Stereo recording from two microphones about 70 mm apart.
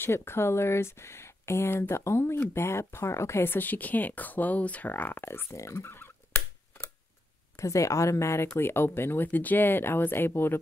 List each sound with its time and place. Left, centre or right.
0.0 s speech: left
5.8 s fowl: left
7.5 s speech: left